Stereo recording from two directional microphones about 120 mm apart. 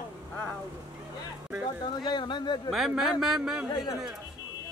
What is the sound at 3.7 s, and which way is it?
Speech, 35° left (ahead or behind).